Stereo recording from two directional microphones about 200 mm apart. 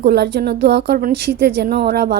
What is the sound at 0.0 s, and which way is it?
A woman's voice, 55° right (ahead or behind).